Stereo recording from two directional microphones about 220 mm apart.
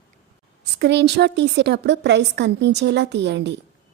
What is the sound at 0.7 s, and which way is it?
A woman's voice, 50° right (ahead or behind).